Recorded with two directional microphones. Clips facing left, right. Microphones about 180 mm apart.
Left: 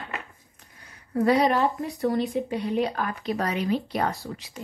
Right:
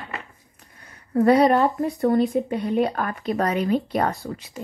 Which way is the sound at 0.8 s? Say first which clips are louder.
Right 4 dB; 55° right (ahead or behind).